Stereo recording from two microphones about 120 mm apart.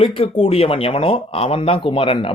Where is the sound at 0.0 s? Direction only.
50° left (ahead or behind).